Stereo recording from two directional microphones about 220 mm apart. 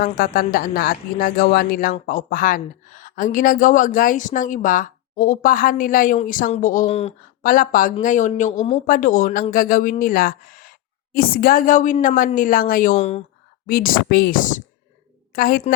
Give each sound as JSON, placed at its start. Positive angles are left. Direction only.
{"t": 0.0, "sound": "a woman's voice", "side_deg": 40}
{"t": 7.4, "sound": "a woman's voice", "side_deg": 40}
{"t": 13.0, "sound": "speech", "side_deg": 30}
{"t": 13.7, "sound": "a woman's voice", "side_deg": 40}